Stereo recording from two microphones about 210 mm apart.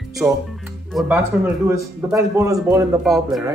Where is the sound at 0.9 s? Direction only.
Centre (ahead or behind).